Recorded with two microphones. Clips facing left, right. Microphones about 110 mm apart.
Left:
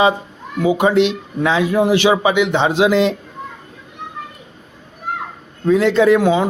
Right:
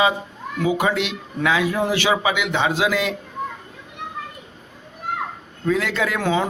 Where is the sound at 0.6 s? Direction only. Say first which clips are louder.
Left 7 dB; 20° left (ahead or behind).